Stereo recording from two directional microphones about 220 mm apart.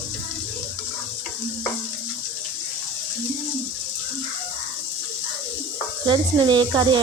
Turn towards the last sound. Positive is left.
turn(degrees=-20)  # may be behind; listen again after turning